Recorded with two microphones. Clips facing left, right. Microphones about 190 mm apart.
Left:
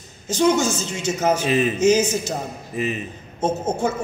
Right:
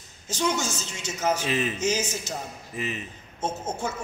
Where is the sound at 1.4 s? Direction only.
15° left (ahead or behind).